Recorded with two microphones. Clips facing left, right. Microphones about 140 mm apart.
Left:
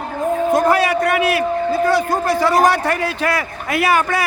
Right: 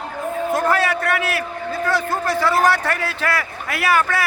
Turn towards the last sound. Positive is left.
turn(degrees=20)  # may be behind; listen again after turning